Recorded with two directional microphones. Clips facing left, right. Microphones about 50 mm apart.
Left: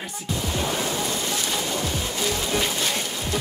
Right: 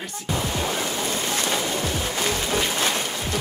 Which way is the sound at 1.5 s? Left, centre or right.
Right.